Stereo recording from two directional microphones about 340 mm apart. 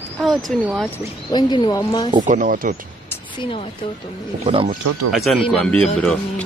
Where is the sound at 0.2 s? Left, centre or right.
Centre.